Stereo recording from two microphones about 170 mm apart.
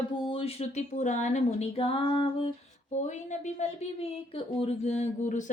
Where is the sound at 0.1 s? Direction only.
35° left (ahead or behind).